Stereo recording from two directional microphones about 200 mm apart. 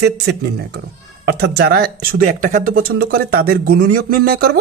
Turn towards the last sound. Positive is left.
turn(degrees=-50)  # may be behind; listen again after turning